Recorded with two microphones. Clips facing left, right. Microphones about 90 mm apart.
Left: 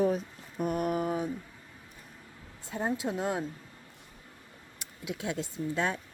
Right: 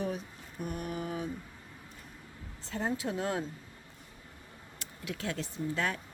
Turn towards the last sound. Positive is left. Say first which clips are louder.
# left 2 dB
turn(degrees=20)  # may be behind; listen again after turning